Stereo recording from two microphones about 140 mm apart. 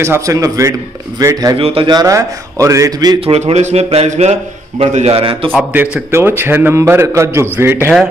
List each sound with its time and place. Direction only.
0.0 s a man's voice: 20° right (ahead or behind)
1.6 s a man's voice: 40° right (ahead or behind)
3.3 s a man's voice: 45° right (ahead or behind)
5.7 s a man's voice: 15° right (ahead or behind)